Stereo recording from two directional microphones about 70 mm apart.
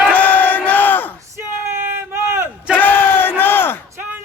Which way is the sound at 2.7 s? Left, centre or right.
Left.